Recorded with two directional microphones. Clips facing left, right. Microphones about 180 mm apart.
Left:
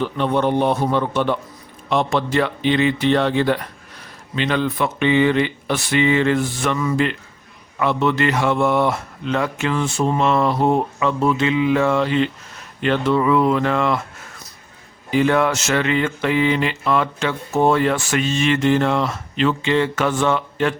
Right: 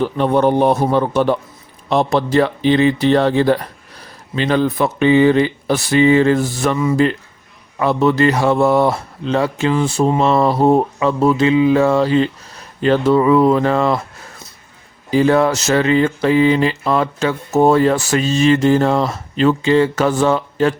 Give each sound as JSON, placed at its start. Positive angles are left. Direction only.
{"t": 0.0, "sound": "mantra", "side_deg": -40}